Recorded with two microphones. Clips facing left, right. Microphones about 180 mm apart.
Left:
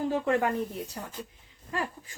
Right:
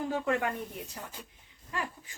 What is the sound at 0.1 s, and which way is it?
Speech, 35° left (ahead or behind).